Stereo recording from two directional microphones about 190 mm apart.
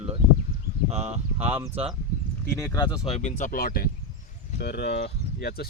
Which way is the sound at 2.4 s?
15° left (ahead or behind).